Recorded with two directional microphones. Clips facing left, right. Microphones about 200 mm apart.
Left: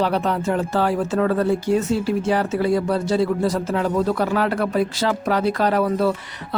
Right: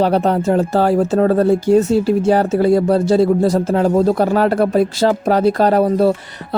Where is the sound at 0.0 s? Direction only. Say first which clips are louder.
Right 6 dB; 40° right (ahead or behind).